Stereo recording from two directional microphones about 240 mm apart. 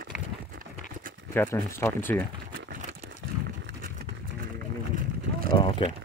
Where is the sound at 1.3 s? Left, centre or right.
Centre.